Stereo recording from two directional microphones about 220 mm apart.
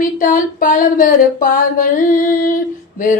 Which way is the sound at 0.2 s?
35° left (ahead or behind).